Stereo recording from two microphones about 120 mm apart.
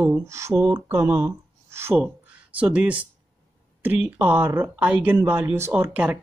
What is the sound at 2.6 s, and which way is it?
Speech, 10° right (ahead or behind).